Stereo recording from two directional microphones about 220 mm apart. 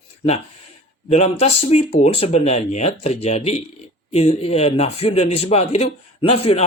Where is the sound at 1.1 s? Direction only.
30° left (ahead or behind).